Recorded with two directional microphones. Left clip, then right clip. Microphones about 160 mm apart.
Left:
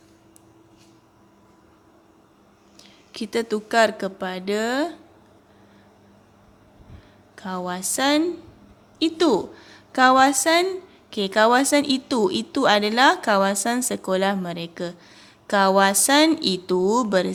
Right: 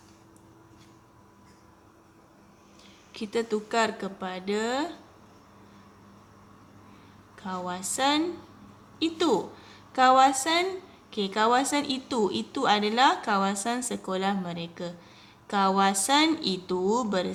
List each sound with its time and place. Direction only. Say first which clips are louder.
2.7 s speech: left 6 dB; 40° left (ahead or behind)
7.3 s a woman's voice: left 5 dB; 40° left (ahead or behind)